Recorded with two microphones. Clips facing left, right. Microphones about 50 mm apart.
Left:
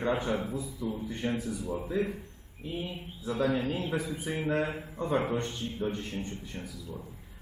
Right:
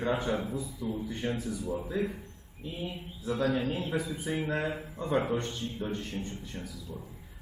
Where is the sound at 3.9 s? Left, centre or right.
Centre.